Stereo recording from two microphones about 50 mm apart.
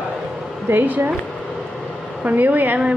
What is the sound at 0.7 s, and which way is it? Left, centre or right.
Speech, right.